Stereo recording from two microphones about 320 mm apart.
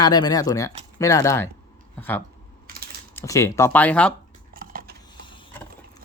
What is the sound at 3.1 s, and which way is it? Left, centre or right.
Speech, centre.